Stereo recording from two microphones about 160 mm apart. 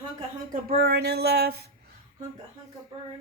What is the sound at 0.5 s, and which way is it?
Speech, 75° right (ahead or behind).